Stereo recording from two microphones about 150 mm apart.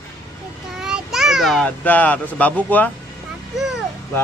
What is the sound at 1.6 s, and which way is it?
Speech, 10° left (ahead or behind).